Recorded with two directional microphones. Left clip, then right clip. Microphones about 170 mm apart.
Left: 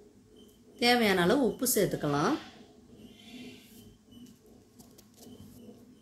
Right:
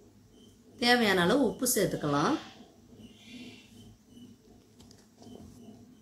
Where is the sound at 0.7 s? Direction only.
20° left (ahead or behind).